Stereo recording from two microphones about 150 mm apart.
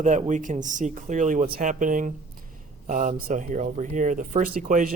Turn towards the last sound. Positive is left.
turn(degrees=-65)  # may be behind; listen again after turning